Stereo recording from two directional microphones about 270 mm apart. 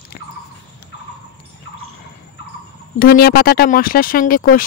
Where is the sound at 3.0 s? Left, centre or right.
Left.